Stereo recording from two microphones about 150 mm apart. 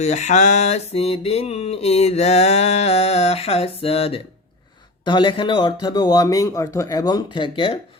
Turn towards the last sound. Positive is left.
turn(degrees=35)  # may be behind; listen again after turning